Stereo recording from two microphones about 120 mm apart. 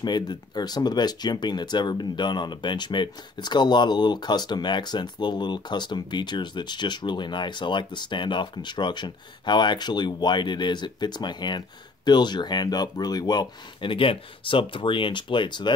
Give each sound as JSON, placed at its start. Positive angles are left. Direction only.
{"t": 0.0, "sound": "speech", "side_deg": 40}